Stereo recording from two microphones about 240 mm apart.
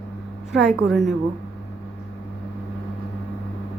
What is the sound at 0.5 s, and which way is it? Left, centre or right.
Speech, centre.